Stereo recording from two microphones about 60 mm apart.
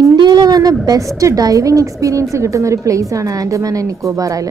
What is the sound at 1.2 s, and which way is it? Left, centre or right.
Speech, right.